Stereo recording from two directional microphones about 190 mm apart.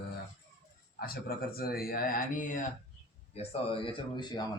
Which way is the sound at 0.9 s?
55° left (ahead or behind).